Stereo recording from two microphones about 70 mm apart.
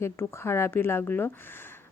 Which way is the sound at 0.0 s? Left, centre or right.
Left.